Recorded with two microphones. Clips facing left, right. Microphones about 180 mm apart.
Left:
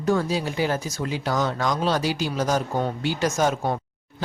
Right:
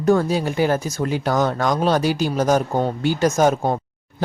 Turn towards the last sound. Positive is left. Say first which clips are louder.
# right 5 dB
turn(degrees=-45)  # may be behind; listen again after turning